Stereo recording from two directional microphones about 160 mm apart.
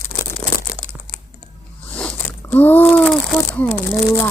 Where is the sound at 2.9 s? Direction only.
5° left (ahead or behind).